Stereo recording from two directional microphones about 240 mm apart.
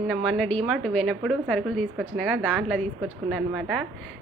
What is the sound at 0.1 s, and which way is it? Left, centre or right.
A woman's voice, centre.